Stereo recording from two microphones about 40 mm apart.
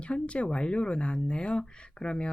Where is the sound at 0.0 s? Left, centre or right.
Left.